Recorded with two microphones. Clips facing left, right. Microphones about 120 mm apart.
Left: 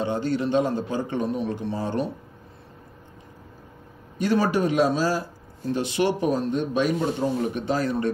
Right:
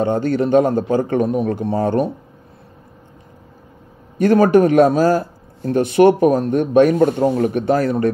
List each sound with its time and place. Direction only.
0.0 s a man's voice: 50° right (ahead or behind)
4.2 s a man's voice: 55° right (ahead or behind)